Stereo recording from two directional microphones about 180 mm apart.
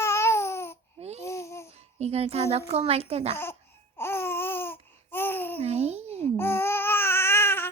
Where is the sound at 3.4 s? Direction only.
10° left (ahead or behind).